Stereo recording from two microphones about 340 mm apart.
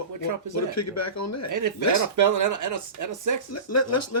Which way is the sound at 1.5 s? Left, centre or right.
Right.